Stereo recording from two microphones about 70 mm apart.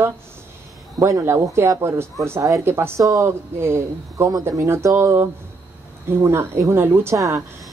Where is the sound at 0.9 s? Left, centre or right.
Right.